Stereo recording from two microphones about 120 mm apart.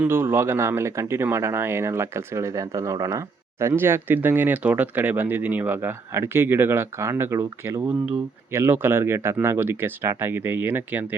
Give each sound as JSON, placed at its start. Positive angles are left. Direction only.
{"t": 0.0, "sound": "speech", "side_deg": -20}